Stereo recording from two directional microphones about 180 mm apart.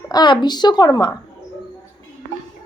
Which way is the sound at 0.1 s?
25° left (ahead or behind).